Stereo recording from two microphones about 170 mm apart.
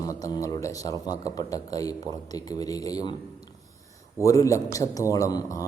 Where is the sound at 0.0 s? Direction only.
20° left (ahead or behind).